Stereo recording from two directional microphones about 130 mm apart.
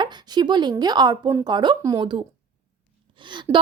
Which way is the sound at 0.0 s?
35° right (ahead or behind).